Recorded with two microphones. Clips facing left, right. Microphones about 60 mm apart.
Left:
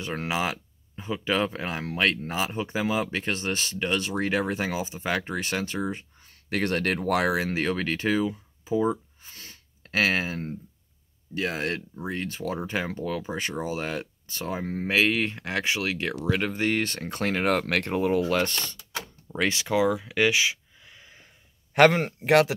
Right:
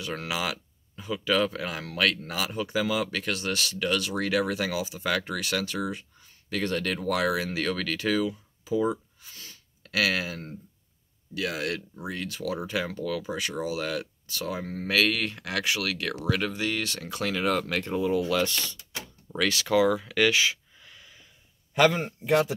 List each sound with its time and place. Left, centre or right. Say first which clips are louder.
0.0 s speech: left 3 dB; left
6.5 s speech: left 3 dB; left
9.2 s a sound: left 1 dB; left
11.3 s speech: left 2 dB; left
19.2 s speech: even; left
21.7 s a man's voice: left 4 dB; left